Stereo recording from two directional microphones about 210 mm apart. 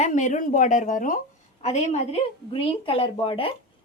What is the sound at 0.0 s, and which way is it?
A woman's voice, 35° left (ahead or behind).